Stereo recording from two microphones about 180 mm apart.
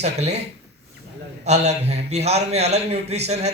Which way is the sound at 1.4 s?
35° right (ahead or behind).